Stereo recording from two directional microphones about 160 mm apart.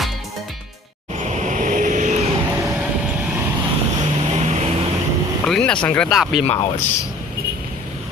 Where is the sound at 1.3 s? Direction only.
50° right (ahead or behind).